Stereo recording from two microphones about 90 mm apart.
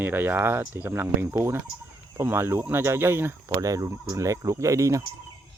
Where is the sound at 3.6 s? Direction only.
40° right (ahead or behind).